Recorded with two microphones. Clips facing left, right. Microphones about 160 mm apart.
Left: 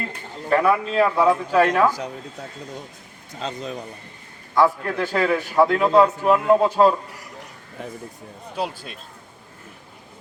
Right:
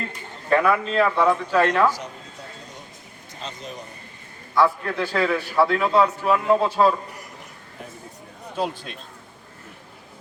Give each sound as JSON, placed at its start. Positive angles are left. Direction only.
{"t": 0.5, "sound": "a man's voice", "side_deg": 10}
{"t": 4.5, "sound": "a man's voice", "side_deg": 15}
{"t": 8.5, "sound": "a man's voice", "side_deg": 10}